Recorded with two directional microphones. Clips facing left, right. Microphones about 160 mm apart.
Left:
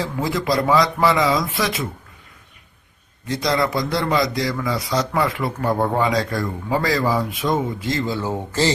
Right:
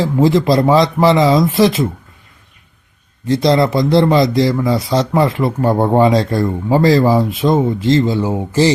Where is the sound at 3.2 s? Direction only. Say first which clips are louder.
Right 8 dB; 25° right (ahead or behind).